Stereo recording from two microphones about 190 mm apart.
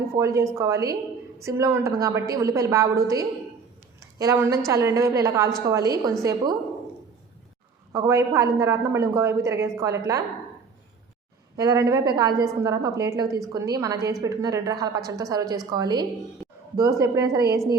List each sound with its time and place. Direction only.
0.2 s a woman's voice: 15° right (ahead or behind)
7.9 s a woman's voice: 15° right (ahead or behind)
11.5 s a woman's voice: 15° right (ahead or behind)